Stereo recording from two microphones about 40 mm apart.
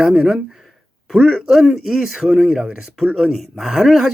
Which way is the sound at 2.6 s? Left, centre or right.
Centre.